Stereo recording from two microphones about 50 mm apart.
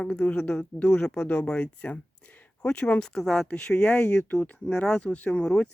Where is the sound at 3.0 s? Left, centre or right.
Centre.